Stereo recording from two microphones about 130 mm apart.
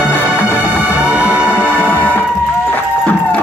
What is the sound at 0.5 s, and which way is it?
Music, 15° right (ahead or behind).